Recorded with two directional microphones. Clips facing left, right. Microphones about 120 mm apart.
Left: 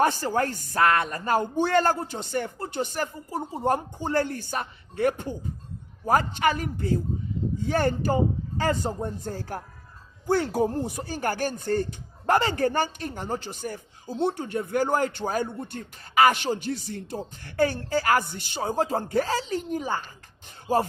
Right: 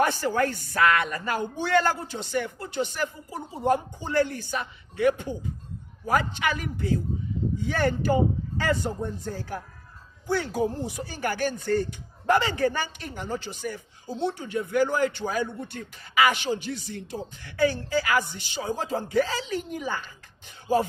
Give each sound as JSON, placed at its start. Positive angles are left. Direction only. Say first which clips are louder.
{"t": 0.0, "sound": "speech", "louder": "even", "side_deg": 35}
{"t": 10.2, "sound": "speech", "louder": "left 3 dB", "side_deg": 55}